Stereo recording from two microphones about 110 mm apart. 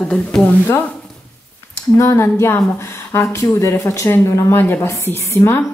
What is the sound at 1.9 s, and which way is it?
Speech, 25° left (ahead or behind).